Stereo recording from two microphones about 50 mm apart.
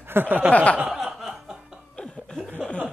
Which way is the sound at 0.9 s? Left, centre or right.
Centre.